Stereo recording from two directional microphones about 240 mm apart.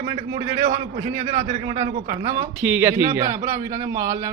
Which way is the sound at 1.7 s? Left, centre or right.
Right.